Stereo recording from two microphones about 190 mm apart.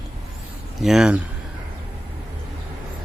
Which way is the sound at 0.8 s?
5° right (ahead or behind).